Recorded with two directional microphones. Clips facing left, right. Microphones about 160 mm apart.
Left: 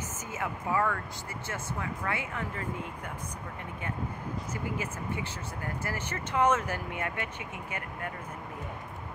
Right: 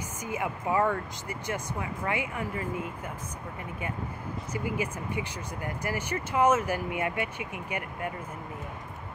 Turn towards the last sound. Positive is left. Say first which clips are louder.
# right 4 dB
turn(degrees=-10)  # may be behind; listen again after turning